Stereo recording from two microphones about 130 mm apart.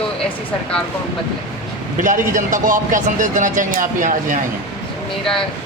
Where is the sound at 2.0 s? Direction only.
80° right.